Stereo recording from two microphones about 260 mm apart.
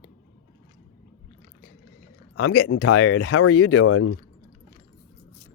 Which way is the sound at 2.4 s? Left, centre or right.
Left.